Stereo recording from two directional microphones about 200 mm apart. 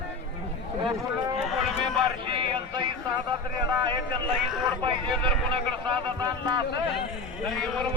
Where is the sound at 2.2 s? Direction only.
25° right (ahead or behind).